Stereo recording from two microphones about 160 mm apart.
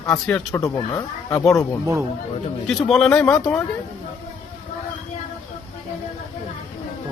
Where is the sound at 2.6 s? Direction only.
Centre (ahead or behind).